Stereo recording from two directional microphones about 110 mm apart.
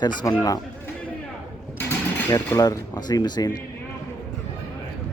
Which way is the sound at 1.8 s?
15° left (ahead or behind).